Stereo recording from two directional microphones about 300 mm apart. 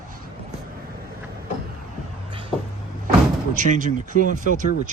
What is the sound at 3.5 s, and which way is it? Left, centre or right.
Speech, right.